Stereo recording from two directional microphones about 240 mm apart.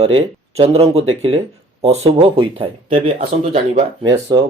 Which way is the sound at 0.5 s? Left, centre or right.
Right.